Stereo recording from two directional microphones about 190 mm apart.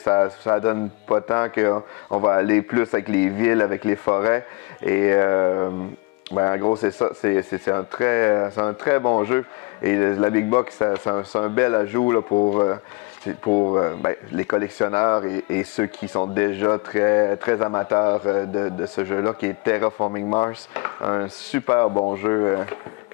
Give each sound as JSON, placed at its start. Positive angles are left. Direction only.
{"t": 0.0, "sound": "speech", "side_deg": 20}
{"t": 1.8, "sound": "speech", "side_deg": 25}
{"t": 12.1, "sound": "speech", "side_deg": 25}